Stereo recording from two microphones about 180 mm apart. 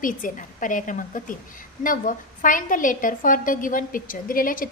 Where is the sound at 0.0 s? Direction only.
45° left (ahead or behind).